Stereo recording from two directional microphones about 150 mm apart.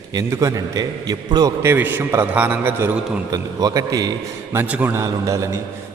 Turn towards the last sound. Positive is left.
turn(degrees=-20)  # may be behind; listen again after turning